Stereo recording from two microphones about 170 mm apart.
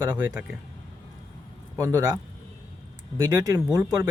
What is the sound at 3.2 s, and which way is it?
Speech, 20° right (ahead or behind).